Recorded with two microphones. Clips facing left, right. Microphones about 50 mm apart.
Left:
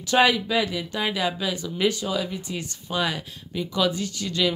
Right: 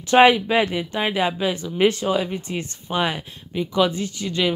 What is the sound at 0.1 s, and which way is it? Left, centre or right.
Speech, right.